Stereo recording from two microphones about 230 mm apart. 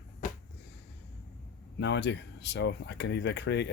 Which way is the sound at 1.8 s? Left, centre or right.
Left.